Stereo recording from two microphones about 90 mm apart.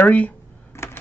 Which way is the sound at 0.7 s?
30° left (ahead or behind).